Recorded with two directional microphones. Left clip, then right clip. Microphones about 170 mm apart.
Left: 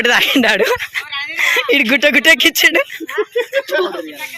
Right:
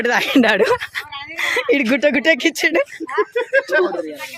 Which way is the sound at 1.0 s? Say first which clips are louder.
Left 8 dB; 55° right (ahead or behind).